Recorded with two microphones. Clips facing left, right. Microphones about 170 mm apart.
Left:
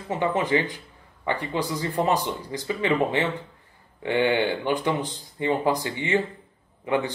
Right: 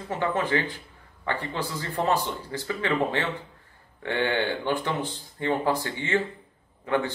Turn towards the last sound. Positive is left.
turn(degrees=15)  # may be behind; listen again after turning